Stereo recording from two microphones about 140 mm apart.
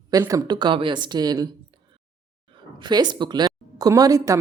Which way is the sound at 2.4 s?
35° right (ahead or behind).